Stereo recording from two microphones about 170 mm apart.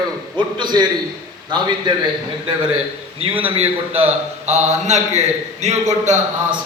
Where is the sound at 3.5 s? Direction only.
35° right (ahead or behind).